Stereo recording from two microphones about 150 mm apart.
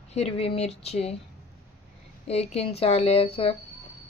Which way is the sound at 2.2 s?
45° left (ahead or behind).